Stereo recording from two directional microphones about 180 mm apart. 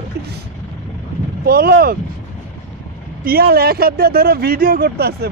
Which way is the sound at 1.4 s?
60° right (ahead or behind).